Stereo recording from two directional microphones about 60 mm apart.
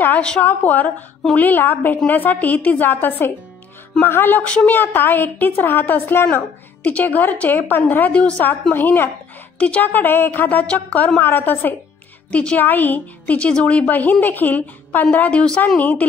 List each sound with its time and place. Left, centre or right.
0.4 s a woman's voice: left
8.1 s a woman's voice: left
8.7 s a woman's voice: left
9.6 s a woman's voice: left
9.9 s a woman's voice: left
10.6 s a woman's voice: left
11.1 s a woman's voice: left
12.3 s a woman's voice: left
12.6 s a woman's voice: left
13.5 s a woman's voice: centre